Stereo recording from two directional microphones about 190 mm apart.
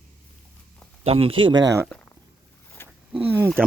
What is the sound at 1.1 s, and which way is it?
Speech, 30° right (ahead or behind).